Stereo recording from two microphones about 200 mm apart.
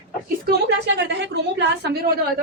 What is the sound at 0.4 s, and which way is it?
A woman's voice, 55° right (ahead or behind).